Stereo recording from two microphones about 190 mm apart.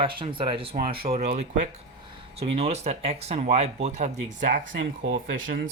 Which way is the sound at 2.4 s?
35° right (ahead or behind).